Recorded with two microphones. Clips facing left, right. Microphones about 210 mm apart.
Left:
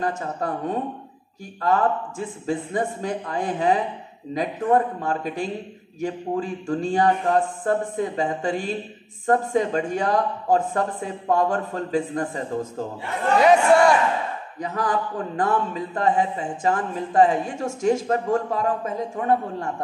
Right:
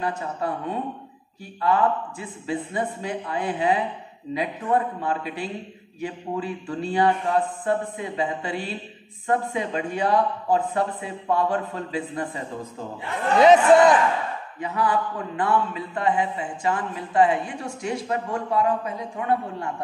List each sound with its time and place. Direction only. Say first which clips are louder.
0.0 s speech: left 1 dB; 45° left (ahead or behind)
13.4 s a man's voice: right 2 dB; 20° right (ahead or behind)
14.6 s speech: right 1 dB; 40° left (ahead or behind)